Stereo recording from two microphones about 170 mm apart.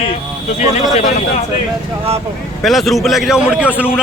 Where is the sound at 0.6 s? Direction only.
45° left (ahead or behind).